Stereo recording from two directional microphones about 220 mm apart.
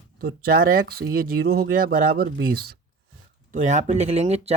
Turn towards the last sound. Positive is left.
turn(degrees=-30)  # may be behind; listen again after turning